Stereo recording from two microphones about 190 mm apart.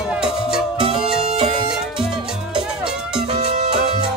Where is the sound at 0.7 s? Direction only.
25° right (ahead or behind).